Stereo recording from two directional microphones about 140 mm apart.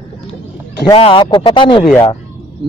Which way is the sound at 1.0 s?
40° left (ahead or behind).